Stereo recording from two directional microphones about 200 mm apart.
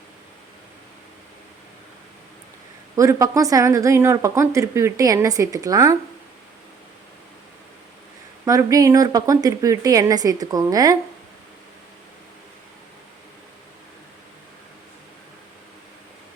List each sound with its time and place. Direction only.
2.9 s speech: 15° right (ahead or behind)
8.4 s speech: 15° right (ahead or behind)